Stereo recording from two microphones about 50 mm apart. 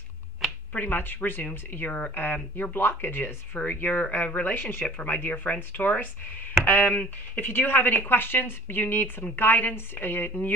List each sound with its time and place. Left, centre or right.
0.7 s speech: left
2.7 s a woman's voice: left
3.6 s speech: left
7.3 s a woman's voice: left